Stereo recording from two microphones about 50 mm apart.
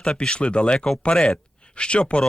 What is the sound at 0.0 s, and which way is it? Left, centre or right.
Speech, centre.